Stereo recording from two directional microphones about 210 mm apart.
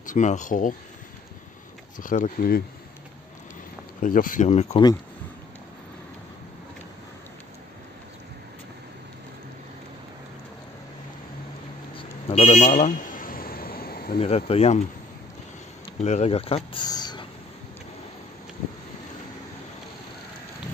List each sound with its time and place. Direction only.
0.0 s speech: 35° left (ahead or behind)
2.0 s speech: 40° left (ahead or behind)
4.0 s speech: 40° left (ahead or behind)
11.9 s vehicle: 25° left (ahead or behind); by 14.1 s 45° left (ahead or behind)
14.1 s speech: 30° left (ahead or behind)
16.0 s speech: 30° left (ahead or behind)